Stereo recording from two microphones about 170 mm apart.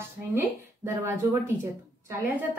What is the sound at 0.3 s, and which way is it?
A woman's voice, 15° right (ahead or behind).